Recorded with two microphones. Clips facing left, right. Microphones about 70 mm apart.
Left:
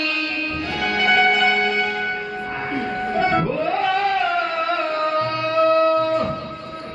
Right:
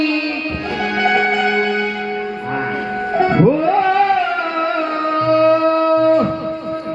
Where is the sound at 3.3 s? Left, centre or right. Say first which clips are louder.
Right 7 dB; right.